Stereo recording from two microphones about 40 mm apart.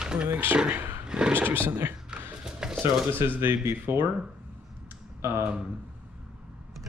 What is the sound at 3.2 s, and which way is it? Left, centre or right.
Speech, right.